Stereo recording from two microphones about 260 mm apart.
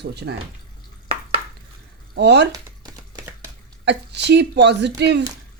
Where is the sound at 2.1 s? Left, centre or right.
Right.